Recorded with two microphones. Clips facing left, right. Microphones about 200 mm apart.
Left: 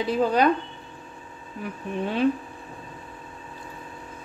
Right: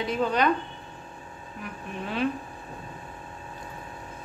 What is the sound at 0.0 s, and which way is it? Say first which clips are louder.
Speech: left 4 dB; 35° left (ahead or behind).